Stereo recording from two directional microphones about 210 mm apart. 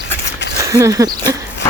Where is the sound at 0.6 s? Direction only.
15° right (ahead or behind).